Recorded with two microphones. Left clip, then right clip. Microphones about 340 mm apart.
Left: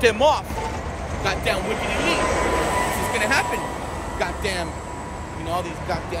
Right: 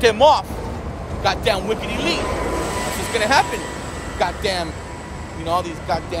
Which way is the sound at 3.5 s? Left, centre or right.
Centre.